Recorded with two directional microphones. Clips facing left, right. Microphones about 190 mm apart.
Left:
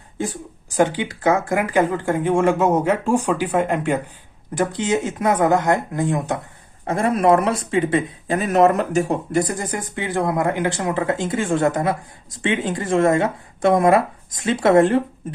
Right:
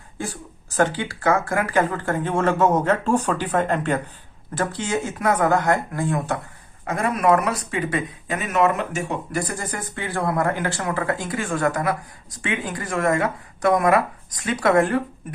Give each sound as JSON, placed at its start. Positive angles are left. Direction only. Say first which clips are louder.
{"t": 0.7, "sound": "speech", "louder": "left 3 dB", "side_deg": 15}
{"t": 9.3, "sound": "speech", "louder": "left 6 dB", "side_deg": 20}